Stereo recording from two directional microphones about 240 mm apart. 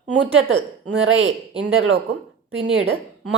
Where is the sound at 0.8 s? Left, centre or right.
Right.